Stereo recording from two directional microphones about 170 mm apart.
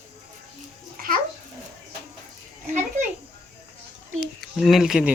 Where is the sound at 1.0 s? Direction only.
55° right (ahead or behind).